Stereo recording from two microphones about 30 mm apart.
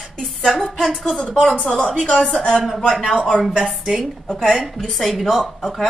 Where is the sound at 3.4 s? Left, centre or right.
Centre.